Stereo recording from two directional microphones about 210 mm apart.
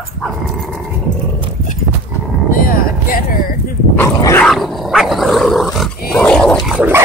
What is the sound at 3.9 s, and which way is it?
Dog, 10° left (ahead or behind).